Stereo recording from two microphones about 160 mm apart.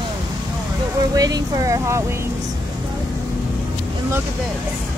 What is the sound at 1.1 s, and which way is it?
Speech, 25° right (ahead or behind).